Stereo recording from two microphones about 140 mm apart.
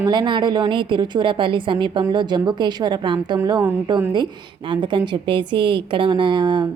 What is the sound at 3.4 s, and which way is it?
Speech, 20° right (ahead or behind).